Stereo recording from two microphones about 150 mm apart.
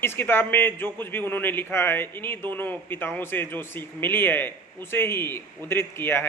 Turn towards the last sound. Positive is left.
turn(degrees=15)  # may be behind; listen again after turning